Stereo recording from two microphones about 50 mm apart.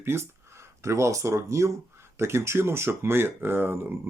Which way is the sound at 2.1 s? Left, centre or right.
Right.